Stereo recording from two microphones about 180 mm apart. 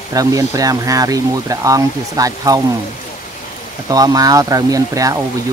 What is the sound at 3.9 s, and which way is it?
Speech, 20° right (ahead or behind).